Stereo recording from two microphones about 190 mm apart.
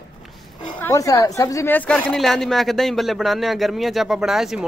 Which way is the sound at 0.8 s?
15° left (ahead or behind).